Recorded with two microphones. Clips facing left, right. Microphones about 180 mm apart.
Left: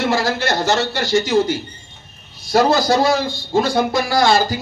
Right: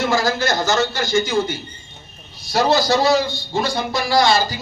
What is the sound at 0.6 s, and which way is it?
A man's voice, 30° left (ahead or behind).